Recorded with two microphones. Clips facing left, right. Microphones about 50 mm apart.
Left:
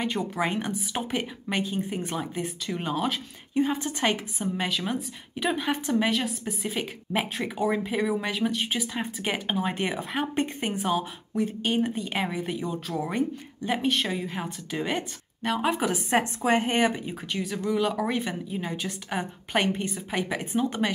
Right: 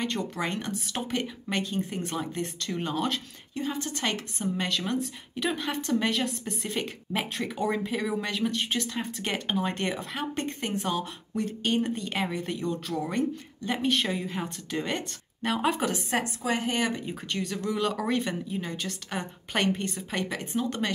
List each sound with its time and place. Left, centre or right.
0.0 s speech: centre
3.5 s a woman's voice: left; by 16.0 s centre
16.1 s a woman's voice: left
17.0 s speech: centre